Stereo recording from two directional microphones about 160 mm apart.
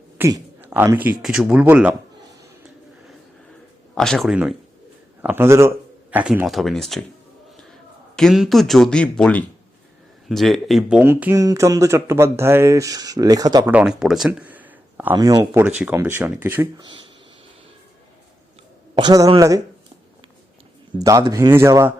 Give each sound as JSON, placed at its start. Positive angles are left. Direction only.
{"t": 0.2, "sound": "speech", "side_deg": -20}
{"t": 0.6, "sound": "speech", "side_deg": -10}
{"t": 3.9, "sound": "speech", "side_deg": 5}
{"t": 5.2, "sound": "a man's voice", "side_deg": -15}
{"t": 13.7, "sound": "speech", "side_deg": -5}
{"t": 15.1, "sound": "speech", "side_deg": -25}
{"t": 15.8, "sound": "speech", "side_deg": -15}
{"t": 16.7, "sound": "speech", "side_deg": -30}
{"t": 18.9, "sound": "speech", "side_deg": -25}
{"t": 21.0, "sound": "speech", "side_deg": -20}